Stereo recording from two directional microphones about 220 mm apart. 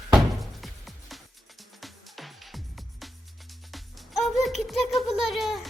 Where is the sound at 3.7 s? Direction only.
Centre (ahead or behind).